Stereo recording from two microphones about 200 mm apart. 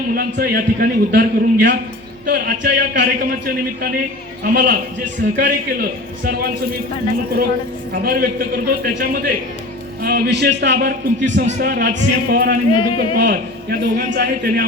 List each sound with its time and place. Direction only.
0.1 s a man's voice: 50° right (ahead or behind)
4.5 s a man's voice: 60° right (ahead or behind)
8.0 s a man's voice: 50° right (ahead or behind)
12.7 s a man's voice: 25° left (ahead or behind)
13.1 s a man's voice: 50° right (ahead or behind)